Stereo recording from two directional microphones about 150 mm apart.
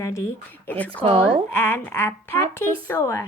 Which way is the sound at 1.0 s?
35° right (ahead or behind).